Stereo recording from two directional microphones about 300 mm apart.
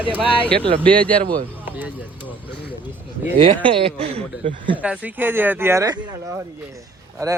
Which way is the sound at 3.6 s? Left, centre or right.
Centre.